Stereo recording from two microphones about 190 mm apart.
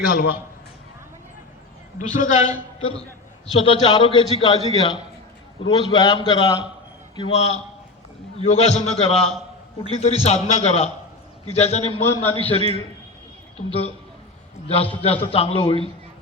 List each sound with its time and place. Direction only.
0.0 s a man's voice: 50° left (ahead or behind)
2.0 s a man's voice: 40° left (ahead or behind)
2.9 s a sound: 5° left (ahead or behind)
3.6 s a man's voice: 30° left (ahead or behind)
15.0 s a man's voice: 30° left (ahead or behind)